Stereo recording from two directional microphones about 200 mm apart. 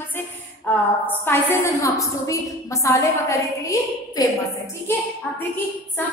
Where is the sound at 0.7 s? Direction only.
10° left (ahead or behind).